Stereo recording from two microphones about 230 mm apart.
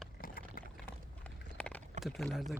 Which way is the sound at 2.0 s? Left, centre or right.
Centre.